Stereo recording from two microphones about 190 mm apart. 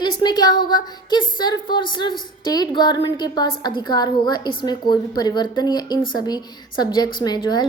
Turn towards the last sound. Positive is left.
turn(degrees=20)  # may be behind; listen again after turning